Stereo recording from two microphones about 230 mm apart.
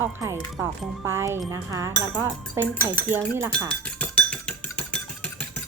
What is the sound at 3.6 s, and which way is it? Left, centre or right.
Dishes, centre.